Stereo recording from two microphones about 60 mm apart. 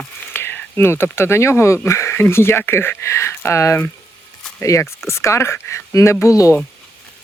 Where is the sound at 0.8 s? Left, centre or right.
Left.